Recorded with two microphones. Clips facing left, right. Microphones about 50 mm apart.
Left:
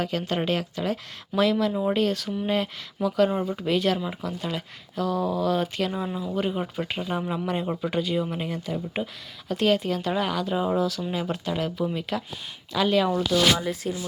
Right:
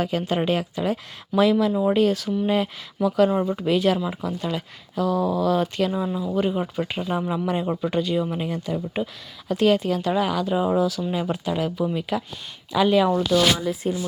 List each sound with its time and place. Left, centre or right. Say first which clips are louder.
0.0 s speech: right 3 dB; centre
13.8 s speech: right 4 dB; right